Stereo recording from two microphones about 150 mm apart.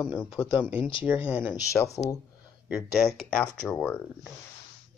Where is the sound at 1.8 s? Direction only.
5° left (ahead or behind).